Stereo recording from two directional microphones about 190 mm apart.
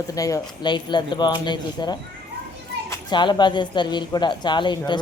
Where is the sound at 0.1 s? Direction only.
20° left (ahead or behind).